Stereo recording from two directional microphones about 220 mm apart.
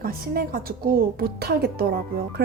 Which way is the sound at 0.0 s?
40° right (ahead or behind).